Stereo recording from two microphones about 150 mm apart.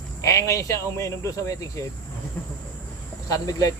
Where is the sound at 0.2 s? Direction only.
20° left (ahead or behind).